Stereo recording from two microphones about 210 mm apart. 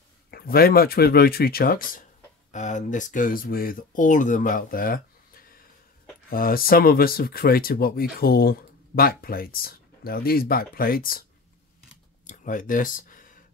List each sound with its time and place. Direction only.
0.3 s speech: 45° left (ahead or behind)
12.3 s speech: 40° left (ahead or behind)